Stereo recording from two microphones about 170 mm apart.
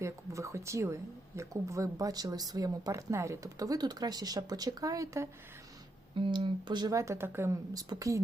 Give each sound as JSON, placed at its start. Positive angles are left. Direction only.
{"t": 0.0, "sound": "a sound", "side_deg": -15}
{"t": 1.4, "sound": "speech", "side_deg": -20}
{"t": 6.1, "sound": "speech", "side_deg": -30}